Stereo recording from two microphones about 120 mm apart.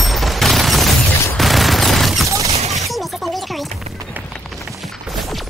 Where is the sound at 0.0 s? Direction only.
Centre (ahead or behind).